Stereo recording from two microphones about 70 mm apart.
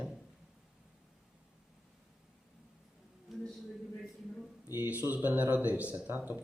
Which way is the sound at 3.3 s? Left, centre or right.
Centre.